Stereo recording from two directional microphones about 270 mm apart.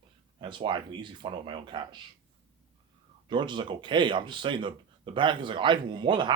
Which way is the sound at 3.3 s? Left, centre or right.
Centre.